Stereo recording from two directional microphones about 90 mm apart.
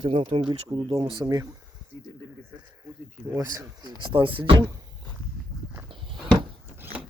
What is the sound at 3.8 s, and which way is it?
Speech, 65° right (ahead or behind).